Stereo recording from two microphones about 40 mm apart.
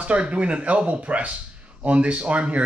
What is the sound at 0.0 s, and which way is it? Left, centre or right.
Speech, right.